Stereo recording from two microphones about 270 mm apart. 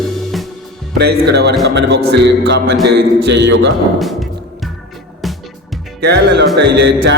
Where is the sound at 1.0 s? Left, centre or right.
Right.